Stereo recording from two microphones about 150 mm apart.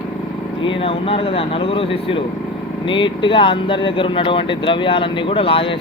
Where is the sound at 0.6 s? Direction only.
35° left (ahead or behind).